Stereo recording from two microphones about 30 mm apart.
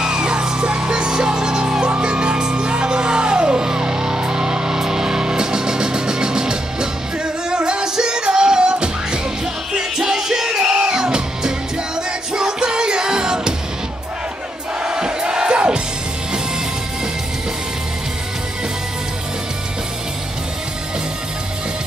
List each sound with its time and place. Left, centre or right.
0.0 s music: right
9.7 s music: centre
14.8 s crowd: right